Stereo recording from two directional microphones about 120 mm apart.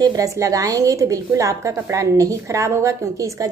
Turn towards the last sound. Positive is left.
turn(degrees=-25)  # may be behind; listen again after turning